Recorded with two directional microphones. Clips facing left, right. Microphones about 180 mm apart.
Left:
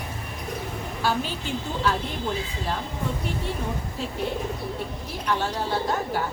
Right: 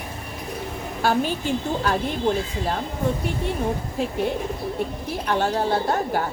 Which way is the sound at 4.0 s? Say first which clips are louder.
Right 8 dB; 50° right (ahead or behind).